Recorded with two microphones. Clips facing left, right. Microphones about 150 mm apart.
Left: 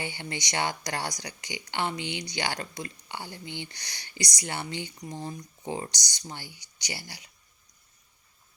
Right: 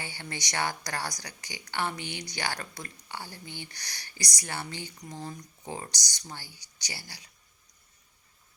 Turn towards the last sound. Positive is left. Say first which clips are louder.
# left 4 dB
turn(degrees=25)  # may be behind; listen again after turning